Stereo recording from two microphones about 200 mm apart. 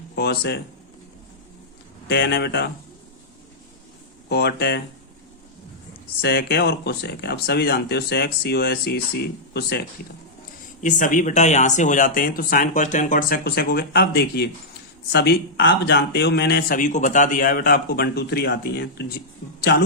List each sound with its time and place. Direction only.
0.2 s speech: 55° left (ahead or behind)
2.0 s speech: 55° left (ahead or behind)
4.3 s speech: 55° left (ahead or behind)
6.2 s speech: 55° left (ahead or behind)
10.8 s speech: 40° left (ahead or behind); by 19.8 s 55° left (ahead or behind)